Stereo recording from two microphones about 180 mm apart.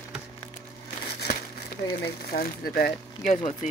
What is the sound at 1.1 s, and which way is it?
Speech, 60° left (ahead or behind).